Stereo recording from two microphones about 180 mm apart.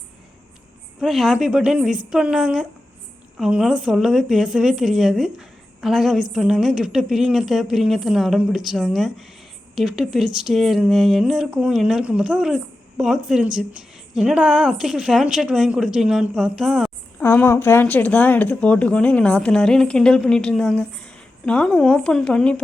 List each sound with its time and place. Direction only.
1.0 s speech: centre (ahead or behind)
17.2 s speech: 10° left (ahead or behind)